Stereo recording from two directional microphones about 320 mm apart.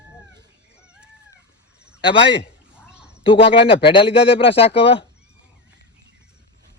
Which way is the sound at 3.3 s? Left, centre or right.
Centre.